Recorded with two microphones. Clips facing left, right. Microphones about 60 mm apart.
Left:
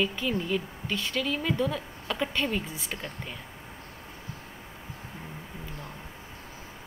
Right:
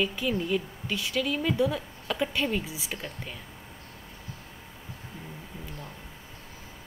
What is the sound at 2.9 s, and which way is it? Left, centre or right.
Speech, centre.